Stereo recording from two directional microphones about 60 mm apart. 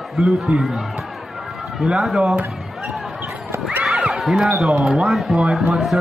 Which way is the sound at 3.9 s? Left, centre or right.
Centre.